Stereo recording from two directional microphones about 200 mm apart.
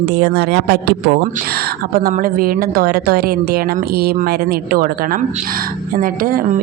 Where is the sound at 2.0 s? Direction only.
45° right (ahead or behind).